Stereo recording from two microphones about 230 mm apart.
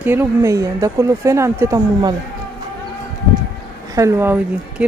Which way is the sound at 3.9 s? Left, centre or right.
Centre.